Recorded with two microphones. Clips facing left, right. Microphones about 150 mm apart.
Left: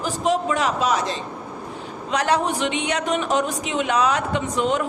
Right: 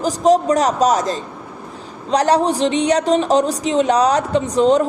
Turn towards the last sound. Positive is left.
turn(degrees=-35)  # may be behind; listen again after turning